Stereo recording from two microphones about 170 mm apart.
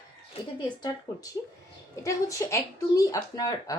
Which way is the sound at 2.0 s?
15° left (ahead or behind).